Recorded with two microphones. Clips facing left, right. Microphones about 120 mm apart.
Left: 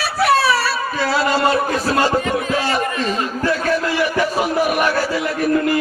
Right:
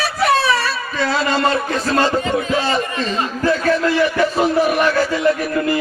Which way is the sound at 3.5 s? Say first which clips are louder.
Right 4 dB; 10° left (ahead or behind).